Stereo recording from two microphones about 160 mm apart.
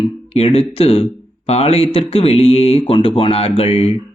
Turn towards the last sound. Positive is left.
turn(degrees=40)  # may be behind; listen again after turning